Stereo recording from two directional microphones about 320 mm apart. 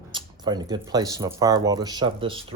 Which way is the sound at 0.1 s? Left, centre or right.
Centre.